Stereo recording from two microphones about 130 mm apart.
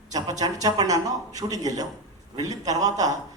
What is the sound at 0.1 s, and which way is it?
A man's voice, 30° right (ahead or behind).